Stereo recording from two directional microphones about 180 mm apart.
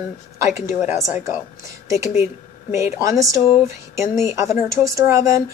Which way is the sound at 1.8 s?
15° right (ahead or behind).